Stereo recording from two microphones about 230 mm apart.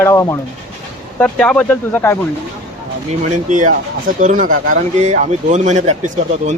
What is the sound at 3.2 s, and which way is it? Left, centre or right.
Speech, right.